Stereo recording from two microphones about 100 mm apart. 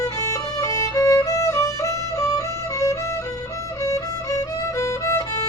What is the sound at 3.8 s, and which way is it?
Music, 35° left (ahead or behind).